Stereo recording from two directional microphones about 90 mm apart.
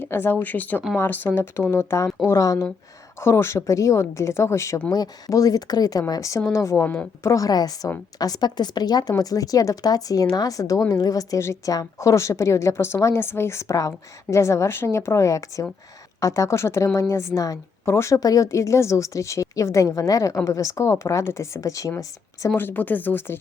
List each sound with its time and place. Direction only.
0.0 s a woman's voice: 25° left (ahead or behind)
4.9 s a woman's voice: 40° left (ahead or behind)
6.8 s a woman's voice: 15° left (ahead or behind)
7.2 s a woman's voice: 35° left (ahead or behind)
22.4 s speech: 25° left (ahead or behind)